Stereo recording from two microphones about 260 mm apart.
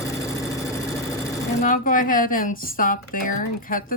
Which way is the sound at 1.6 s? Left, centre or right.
Left.